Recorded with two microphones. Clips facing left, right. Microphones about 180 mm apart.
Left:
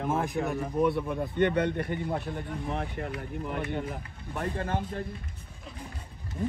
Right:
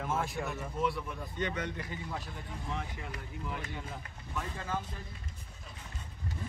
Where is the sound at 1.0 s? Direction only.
60° left (ahead or behind).